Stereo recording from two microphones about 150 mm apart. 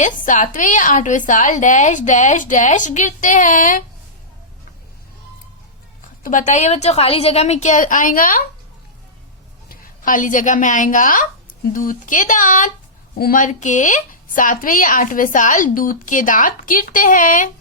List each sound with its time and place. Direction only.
0.0 s a woman's voice: 55° left (ahead or behind)
6.2 s a woman's voice: 55° left (ahead or behind)
9.6 s a woman's voice: 65° left (ahead or behind)
13.1 s a woman's voice: 75° left (ahead or behind); by 17.5 s 60° left (ahead or behind)